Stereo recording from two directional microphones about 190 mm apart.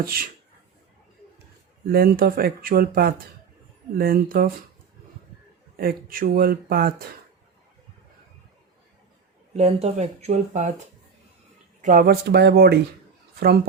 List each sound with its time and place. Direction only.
0.0 s speech: 50° right (ahead or behind)
1.9 s speech: 50° right (ahead or behind)
5.7 s speech: 50° right (ahead or behind)
9.5 s speech: 35° right (ahead or behind); by 12.8 s 55° right (ahead or behind)